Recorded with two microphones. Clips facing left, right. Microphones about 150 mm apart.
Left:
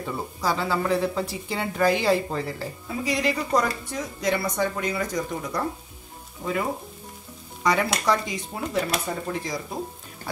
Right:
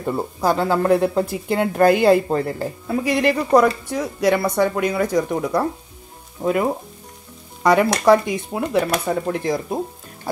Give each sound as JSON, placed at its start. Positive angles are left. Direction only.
{"t": 0.0, "sound": "speech", "side_deg": -55}